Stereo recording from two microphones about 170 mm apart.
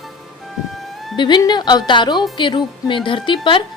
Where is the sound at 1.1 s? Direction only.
25° left (ahead or behind).